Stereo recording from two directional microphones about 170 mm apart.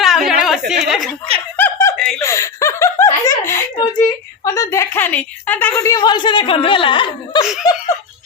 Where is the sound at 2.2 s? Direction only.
15° left (ahead or behind).